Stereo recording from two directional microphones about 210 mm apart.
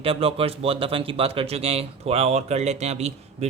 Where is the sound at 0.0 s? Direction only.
25° right (ahead or behind).